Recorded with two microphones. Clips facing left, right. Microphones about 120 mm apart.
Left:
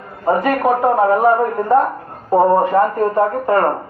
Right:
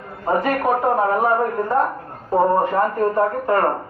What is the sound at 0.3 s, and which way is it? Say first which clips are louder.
A man's voice: left 4 dB; 15° left (ahead or behind).